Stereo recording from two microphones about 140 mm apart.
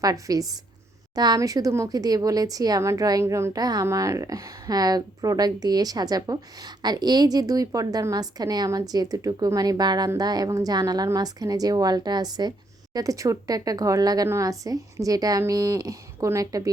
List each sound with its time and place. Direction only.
0.0 s speech: 25° right (ahead or behind)